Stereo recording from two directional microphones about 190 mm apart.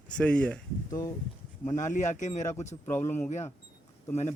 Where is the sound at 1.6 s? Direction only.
40° left (ahead or behind).